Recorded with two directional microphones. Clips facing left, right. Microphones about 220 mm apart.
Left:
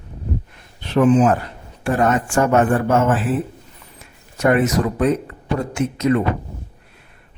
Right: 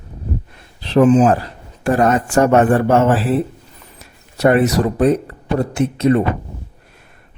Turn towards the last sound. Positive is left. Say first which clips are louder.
# right 3 dB
turn(degrees=-30)  # may be behind; listen again after turning